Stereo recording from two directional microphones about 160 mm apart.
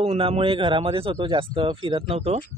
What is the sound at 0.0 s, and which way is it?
Speech, 40° right (ahead or behind).